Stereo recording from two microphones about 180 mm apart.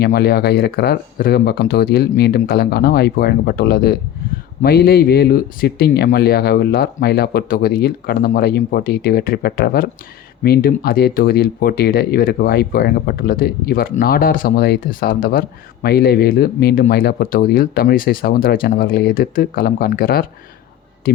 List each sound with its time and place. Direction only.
0.0 s speech: 60° left (ahead or behind)